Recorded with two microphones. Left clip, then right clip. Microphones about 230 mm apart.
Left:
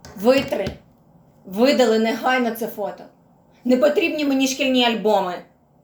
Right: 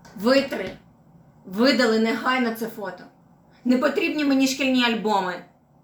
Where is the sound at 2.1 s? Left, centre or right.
Right.